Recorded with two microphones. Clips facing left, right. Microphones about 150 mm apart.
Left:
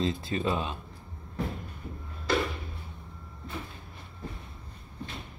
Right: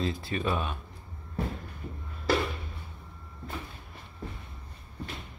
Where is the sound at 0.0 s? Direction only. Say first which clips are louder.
Left 2 dB; 25° left (ahead or behind).